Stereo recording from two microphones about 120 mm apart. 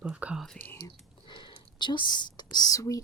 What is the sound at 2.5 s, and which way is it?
Speech, 30° left (ahead or behind).